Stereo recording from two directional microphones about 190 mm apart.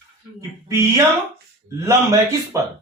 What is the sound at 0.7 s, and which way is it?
Speech, 15° right (ahead or behind).